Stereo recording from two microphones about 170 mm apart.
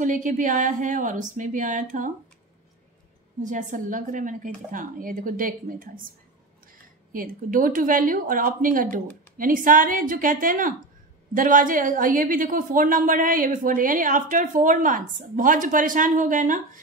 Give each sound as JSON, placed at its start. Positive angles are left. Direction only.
{"t": 0.0, "sound": "a woman's voice", "side_deg": -50}
{"t": 3.4, "sound": "a woman's voice", "side_deg": -50}
{"t": 7.1, "sound": "a woman's voice", "side_deg": -55}